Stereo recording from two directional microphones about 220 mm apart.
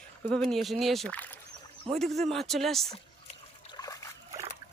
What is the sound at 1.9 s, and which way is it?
Speech, 25° right (ahead or behind).